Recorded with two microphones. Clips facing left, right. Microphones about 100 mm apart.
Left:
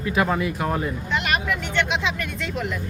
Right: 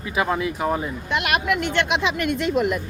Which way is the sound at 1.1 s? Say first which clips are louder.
Right 3 dB; 65° right (ahead or behind).